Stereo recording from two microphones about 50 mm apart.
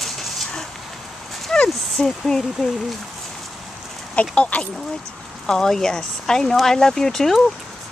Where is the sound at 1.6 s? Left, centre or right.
Centre.